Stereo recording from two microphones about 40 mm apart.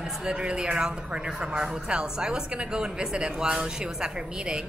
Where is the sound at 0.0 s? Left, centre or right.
Right.